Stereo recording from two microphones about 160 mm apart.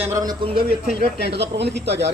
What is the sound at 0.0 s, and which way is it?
Speech, 20° right (ahead or behind).